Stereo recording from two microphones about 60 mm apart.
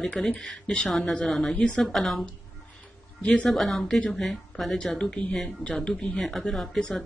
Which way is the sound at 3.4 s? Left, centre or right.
Centre.